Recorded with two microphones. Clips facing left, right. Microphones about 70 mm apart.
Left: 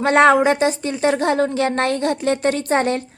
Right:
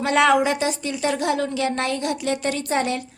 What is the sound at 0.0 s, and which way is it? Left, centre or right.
A woman's voice, left.